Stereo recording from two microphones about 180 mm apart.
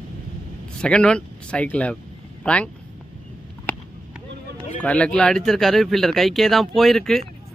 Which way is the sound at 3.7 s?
10° left (ahead or behind).